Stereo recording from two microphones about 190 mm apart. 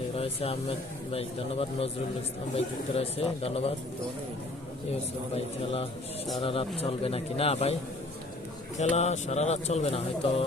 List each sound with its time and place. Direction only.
0.2 s speech: 30° left (ahead or behind)
5.3 s speech: 30° left (ahead or behind)
8.8 s speech: 35° left (ahead or behind)